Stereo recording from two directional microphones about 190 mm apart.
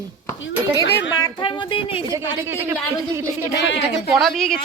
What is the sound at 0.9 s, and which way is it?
Speech, 60° left (ahead or behind).